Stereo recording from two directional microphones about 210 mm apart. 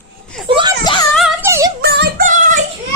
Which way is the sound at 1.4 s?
15° right (ahead or behind).